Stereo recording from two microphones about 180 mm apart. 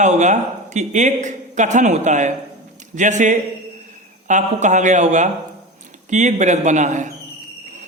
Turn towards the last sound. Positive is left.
turn(degrees=-45)  # may be behind; listen again after turning